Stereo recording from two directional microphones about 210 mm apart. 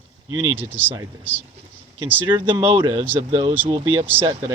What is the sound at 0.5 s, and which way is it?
Speech, 10° right (ahead or behind).